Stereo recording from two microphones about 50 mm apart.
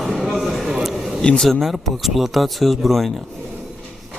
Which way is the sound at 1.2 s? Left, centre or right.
Centre.